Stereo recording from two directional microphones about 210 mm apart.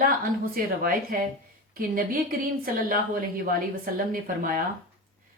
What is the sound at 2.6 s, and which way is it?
A woman's voice, 45° right (ahead or behind).